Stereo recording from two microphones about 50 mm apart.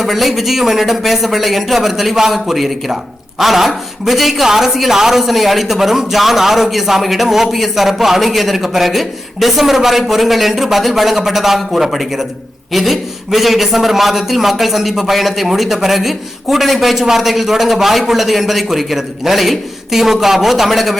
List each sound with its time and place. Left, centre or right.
0.0 s a man's voice: centre